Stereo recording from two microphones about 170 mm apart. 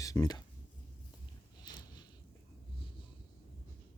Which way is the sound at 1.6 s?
25° left (ahead or behind).